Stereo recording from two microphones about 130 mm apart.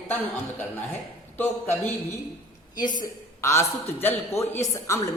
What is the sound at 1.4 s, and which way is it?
Speech, 15° left (ahead or behind).